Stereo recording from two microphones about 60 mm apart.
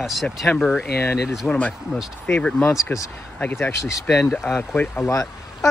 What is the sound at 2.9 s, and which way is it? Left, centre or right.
Speech, left.